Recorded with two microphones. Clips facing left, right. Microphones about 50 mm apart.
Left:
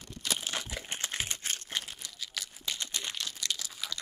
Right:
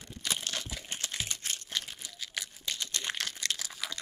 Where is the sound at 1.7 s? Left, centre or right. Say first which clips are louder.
Right 1 dB; centre.